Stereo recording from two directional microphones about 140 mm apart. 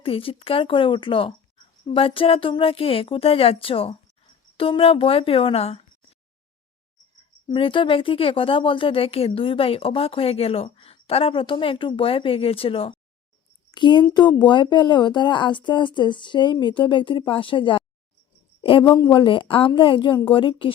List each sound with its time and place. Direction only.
0.0 s speech: 40° left (ahead or behind)
7.4 s speech: 35° left (ahead or behind)